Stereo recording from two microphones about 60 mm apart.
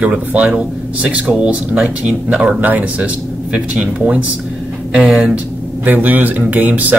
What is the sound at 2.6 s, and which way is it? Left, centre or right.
Speech, right.